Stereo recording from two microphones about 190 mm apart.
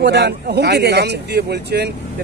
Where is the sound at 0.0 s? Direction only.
60° right (ahead or behind).